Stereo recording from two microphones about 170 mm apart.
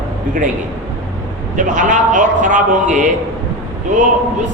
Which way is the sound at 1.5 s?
50° right (ahead or behind).